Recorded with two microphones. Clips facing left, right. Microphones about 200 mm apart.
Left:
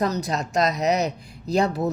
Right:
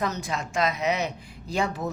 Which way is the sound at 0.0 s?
35° left (ahead or behind).